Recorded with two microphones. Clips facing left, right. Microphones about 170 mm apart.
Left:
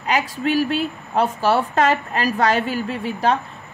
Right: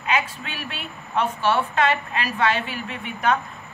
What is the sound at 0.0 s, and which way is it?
Speech, 40° left (ahead or behind).